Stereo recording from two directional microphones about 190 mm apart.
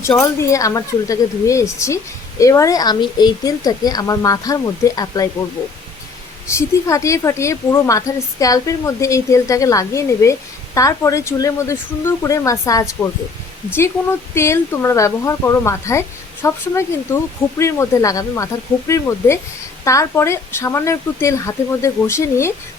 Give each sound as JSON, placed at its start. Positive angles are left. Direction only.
{"t": 0.0, "sound": "a woman's voice", "side_deg": 15}
{"t": 6.5, "sound": "a woman's voice", "side_deg": 15}